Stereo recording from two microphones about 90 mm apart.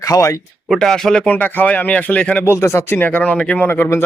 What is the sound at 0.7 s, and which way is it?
Speech, 5° left (ahead or behind).